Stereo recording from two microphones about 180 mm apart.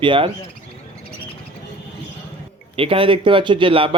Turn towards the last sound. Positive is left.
turn(degrees=-30)  # may be behind; listen again after turning